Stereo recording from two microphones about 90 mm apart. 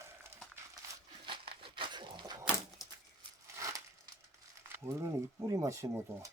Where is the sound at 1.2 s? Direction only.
70° right (ahead or behind).